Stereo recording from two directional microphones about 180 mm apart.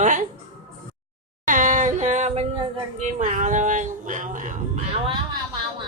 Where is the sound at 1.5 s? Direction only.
45° right (ahead or behind).